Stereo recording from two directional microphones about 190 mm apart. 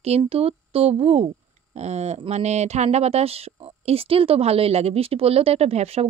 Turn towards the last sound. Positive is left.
turn(degrees=-35)  # may be behind; listen again after turning